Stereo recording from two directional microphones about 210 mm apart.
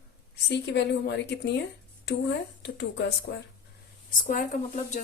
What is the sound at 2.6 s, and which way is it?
Speech, 55° left (ahead or behind).